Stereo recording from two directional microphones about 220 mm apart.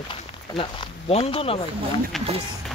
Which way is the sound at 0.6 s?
25° left (ahead or behind).